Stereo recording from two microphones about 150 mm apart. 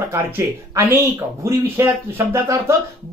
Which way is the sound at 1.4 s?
15° right (ahead or behind).